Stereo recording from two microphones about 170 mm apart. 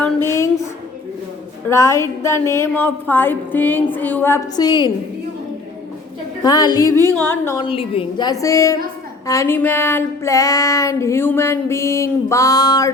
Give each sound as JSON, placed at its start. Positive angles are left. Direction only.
{"t": 0.0, "sound": "a sound", "side_deg": 15}
{"t": 1.6, "sound": "female singing", "side_deg": 15}
{"t": 4.5, "sound": "a woman's voice", "side_deg": 25}
{"t": 6.4, "sound": "a woman's voice", "side_deg": 25}
{"t": 7.0, "sound": "female singing", "side_deg": 10}
{"t": 7.6, "sound": "a woman's voice", "side_deg": 35}
{"t": 9.2, "sound": "female singing", "side_deg": 20}